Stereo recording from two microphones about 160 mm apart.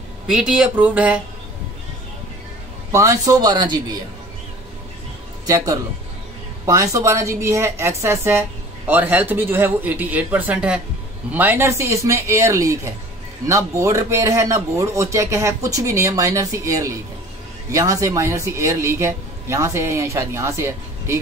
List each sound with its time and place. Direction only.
0.3 s a woman's voice: 5° right (ahead or behind)
2.9 s a man's voice: 20° right (ahead or behind)
6.6 s a woman's voice: 20° right (ahead or behind)